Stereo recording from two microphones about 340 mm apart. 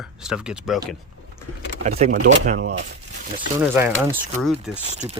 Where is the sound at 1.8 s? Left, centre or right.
Right.